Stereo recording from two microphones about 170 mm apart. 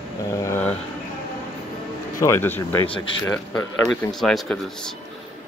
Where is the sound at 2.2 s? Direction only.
15° left (ahead or behind).